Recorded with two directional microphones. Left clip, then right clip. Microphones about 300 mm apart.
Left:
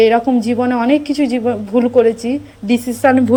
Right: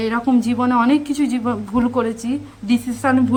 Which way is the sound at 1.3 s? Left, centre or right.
Right.